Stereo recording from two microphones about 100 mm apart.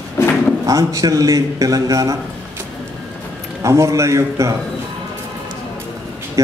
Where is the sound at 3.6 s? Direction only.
30° right (ahead or behind).